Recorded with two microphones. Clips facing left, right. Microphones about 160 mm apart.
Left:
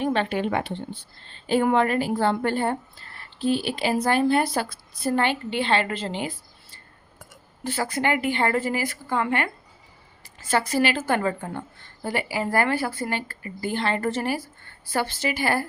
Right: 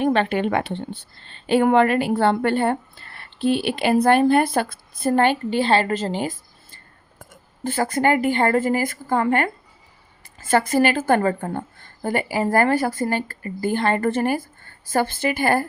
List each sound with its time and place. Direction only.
0.0 s a woman's voice: 60° right (ahead or behind); by 6.3 s 40° right (ahead or behind)
7.6 s a woman's voice: 50° right (ahead or behind)